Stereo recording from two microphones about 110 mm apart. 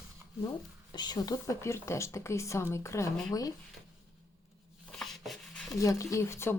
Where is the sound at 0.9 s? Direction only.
40° left (ahead or behind).